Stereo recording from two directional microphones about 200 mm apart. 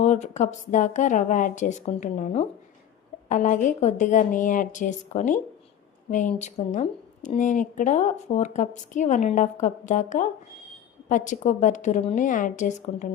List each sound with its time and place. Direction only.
0.0 s speech: 35° left (ahead or behind)